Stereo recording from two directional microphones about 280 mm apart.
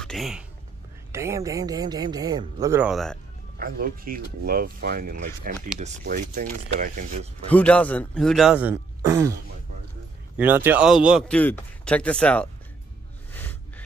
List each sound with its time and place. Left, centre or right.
0.0 s speech: centre
3.5 s speech: right
7.4 s a man's voice: centre
13.3 s music: centre